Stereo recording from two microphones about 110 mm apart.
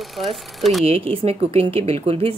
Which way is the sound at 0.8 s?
65° right (ahead or behind).